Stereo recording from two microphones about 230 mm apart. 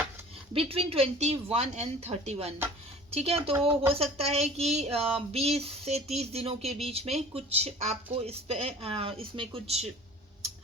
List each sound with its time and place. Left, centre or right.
0.5 s speech: right